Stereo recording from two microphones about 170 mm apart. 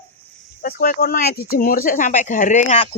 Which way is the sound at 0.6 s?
55° left (ahead or behind).